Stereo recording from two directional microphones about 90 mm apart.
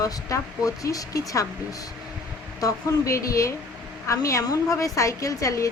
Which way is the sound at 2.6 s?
35° left (ahead or behind).